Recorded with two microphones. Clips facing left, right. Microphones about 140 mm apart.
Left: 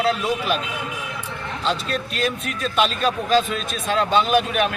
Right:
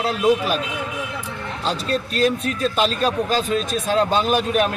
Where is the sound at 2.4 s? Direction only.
35° right (ahead or behind).